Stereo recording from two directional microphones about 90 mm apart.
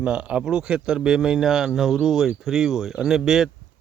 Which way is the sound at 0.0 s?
10° right (ahead or behind).